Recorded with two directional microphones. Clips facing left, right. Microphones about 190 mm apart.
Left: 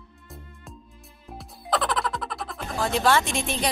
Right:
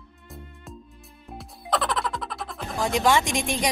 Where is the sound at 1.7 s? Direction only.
Centre (ahead or behind).